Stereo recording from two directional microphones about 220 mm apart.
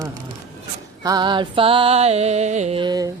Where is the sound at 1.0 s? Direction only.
20° right (ahead or behind).